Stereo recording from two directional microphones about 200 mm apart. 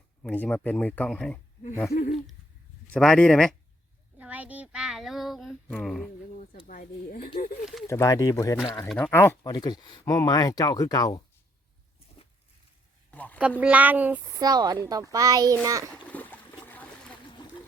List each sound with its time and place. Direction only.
0.2 s speech: 5° left (ahead or behind)
1.9 s a sound: 40° left (ahead or behind)
2.8 s a child's voice: 5° left (ahead or behind)
4.2 s a child's voice: 5° right (ahead or behind)
6.7 s speech: 45° left (ahead or behind)
7.9 s speech: 15° left (ahead or behind)
13.1 s a sound: 10° left (ahead or behind)
13.6 s speech: 5° right (ahead or behind)
14.3 s speech: 20° right (ahead or behind)
16.0 s a sound: 10° left (ahead or behind)